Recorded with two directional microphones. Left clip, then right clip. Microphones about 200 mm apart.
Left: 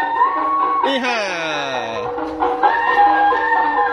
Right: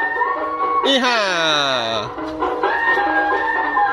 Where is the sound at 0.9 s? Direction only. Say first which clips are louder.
Right 3 dB; 20° right (ahead or behind).